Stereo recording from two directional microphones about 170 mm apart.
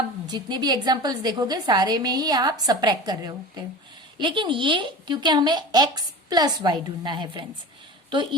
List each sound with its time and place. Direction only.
0.3 s a woman's voice: 25° right (ahead or behind)